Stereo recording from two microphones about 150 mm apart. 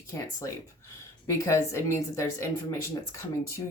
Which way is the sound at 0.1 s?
25° left (ahead or behind).